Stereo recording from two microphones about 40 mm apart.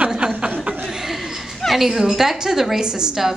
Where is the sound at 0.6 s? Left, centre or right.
Right.